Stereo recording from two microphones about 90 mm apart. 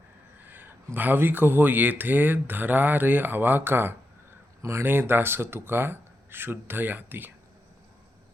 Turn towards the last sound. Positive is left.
turn(degrees=-20)  # may be behind; listen again after turning